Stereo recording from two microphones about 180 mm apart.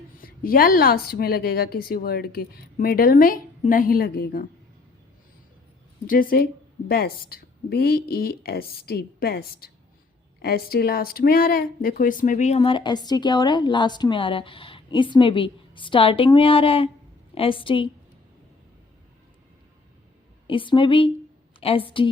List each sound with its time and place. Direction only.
0.2 s a woman's voice: 55° left (ahead or behind)
6.1 s a woman's voice: 50° left (ahead or behind); by 17.8 s 30° left (ahead or behind)
20.5 s speech: 30° left (ahead or behind)